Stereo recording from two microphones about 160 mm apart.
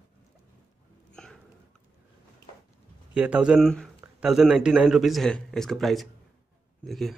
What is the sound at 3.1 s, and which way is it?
A man's voice, 5° right (ahead or behind).